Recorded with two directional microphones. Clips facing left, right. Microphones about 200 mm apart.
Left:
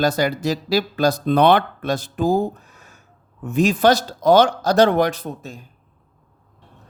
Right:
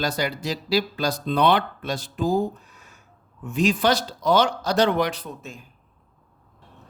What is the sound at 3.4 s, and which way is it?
Speech, 45° left (ahead or behind).